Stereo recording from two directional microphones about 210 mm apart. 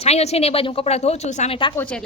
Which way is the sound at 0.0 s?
30° left (ahead or behind).